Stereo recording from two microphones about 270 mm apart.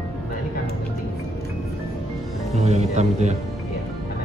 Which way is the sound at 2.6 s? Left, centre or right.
Right.